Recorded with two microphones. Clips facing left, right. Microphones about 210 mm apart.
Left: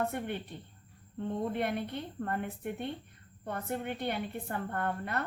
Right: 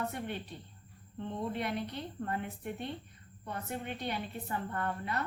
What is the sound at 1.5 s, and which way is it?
A woman's voice, 55° left (ahead or behind).